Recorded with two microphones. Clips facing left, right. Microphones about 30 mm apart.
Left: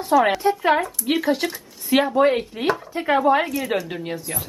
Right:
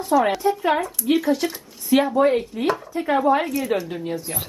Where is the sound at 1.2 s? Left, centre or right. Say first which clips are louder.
Even; left.